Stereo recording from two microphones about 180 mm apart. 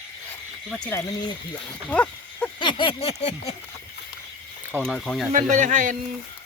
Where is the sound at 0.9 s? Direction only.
15° left (ahead or behind).